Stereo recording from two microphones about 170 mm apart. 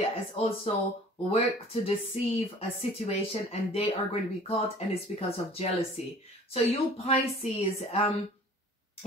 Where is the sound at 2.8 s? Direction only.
40° left (ahead or behind).